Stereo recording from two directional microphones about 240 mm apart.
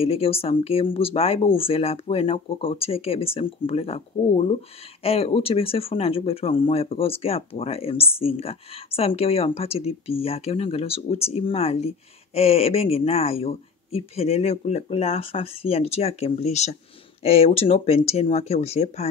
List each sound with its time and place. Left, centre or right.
0.0 s speech: left